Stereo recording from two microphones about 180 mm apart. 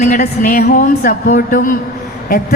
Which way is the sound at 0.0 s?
45° left (ahead or behind).